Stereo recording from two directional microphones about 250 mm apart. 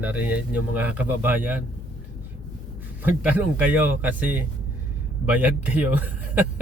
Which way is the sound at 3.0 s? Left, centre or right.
Centre.